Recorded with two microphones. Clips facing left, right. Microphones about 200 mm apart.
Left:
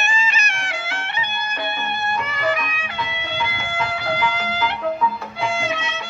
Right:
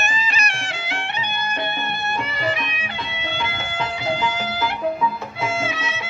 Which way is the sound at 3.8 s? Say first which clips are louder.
Even; 15° right (ahead or behind).